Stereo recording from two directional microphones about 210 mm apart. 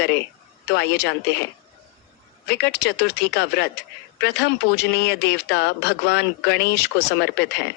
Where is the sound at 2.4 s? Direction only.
55° left (ahead or behind).